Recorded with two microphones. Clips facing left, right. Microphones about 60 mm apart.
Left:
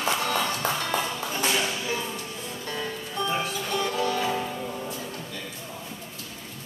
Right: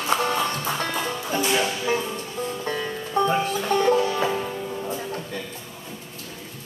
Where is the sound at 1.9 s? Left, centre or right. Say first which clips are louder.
Right 5 dB; right.